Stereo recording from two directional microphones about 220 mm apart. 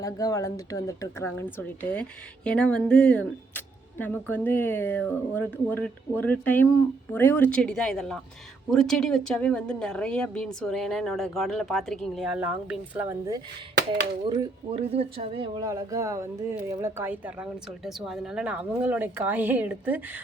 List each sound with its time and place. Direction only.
0.0 s a woman's voice: 15° left (ahead or behind); by 13.4 s 15° right (ahead or behind)
14.3 s speech: 25° right (ahead or behind); by 20.2 s 5° right (ahead or behind)